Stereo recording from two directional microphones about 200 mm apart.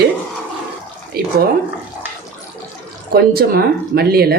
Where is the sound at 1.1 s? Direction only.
50° right (ahead or behind).